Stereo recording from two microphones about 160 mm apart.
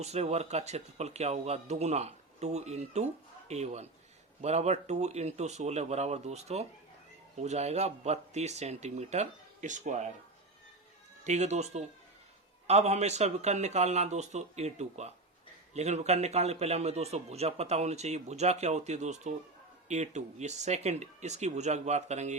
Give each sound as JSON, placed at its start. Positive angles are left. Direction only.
{"t": 0.0, "sound": "a man's voice", "side_deg": -40}
{"t": 11.2, "sound": "a man's voice", "side_deg": -45}